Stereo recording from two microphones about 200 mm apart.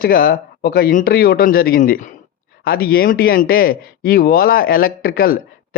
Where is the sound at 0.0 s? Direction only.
45° left (ahead or behind).